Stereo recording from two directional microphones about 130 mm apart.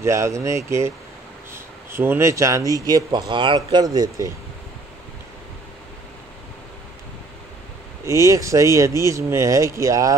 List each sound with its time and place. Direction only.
0.0 s speech: 20° right (ahead or behind)
8.0 s speech: 20° right (ahead or behind)